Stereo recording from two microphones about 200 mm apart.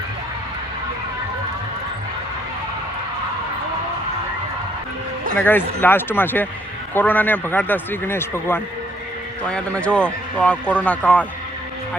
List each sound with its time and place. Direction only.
5.4 s a man's voice: 10° left (ahead or behind)